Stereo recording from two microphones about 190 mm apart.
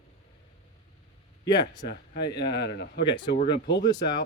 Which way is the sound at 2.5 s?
60° left (ahead or behind).